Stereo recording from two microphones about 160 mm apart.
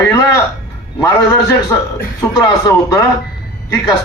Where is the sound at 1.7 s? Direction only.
20° left (ahead or behind).